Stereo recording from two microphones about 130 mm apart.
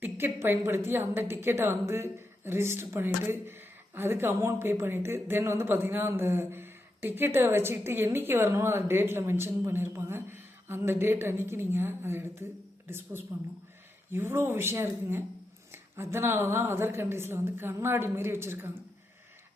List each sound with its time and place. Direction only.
0.0 s a woman's voice: 15° right (ahead or behind)